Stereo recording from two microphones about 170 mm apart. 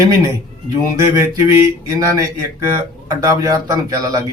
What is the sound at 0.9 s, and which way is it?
Mantra, 15° right (ahead or behind).